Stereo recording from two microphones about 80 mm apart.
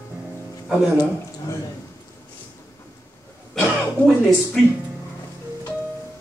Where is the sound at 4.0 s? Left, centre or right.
Centre.